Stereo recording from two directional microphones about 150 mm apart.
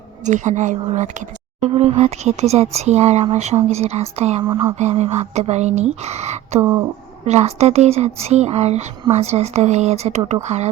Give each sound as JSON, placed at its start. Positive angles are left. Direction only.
{"t": 0.3, "sound": "speech", "side_deg": -55}
{"t": 4.4, "sound": "a sound", "side_deg": -30}
{"t": 4.8, "sound": "speech", "side_deg": -45}
{"t": 6.6, "sound": "speech", "side_deg": -25}
{"t": 7.3, "sound": "speech", "side_deg": -45}